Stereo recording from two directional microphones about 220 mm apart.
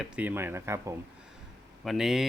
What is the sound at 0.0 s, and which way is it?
Speech, 5° right (ahead or behind).